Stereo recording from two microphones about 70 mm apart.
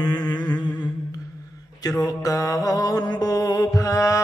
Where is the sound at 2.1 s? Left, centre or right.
Left.